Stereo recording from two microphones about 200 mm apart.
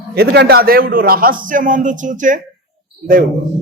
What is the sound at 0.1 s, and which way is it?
A man's voice, 50° right (ahead or behind).